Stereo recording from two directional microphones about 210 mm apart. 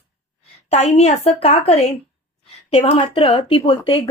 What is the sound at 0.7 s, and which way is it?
Speech, 30° left (ahead or behind).